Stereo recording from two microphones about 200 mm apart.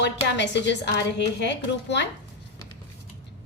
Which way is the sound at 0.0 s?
60° left (ahead or behind).